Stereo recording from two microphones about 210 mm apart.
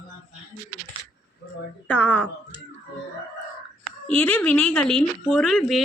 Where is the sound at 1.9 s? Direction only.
5° left (ahead or behind).